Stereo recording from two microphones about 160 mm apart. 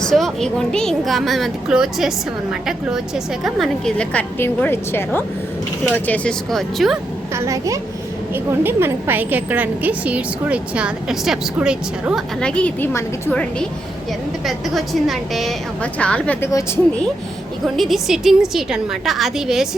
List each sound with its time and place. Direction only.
0.0 s a woman's voice: centre (ahead or behind)
7.3 s a woman's voice: 20° right (ahead or behind)
12.4 s a woman's voice: 5° left (ahead or behind)
17.7 s speech: centre (ahead or behind)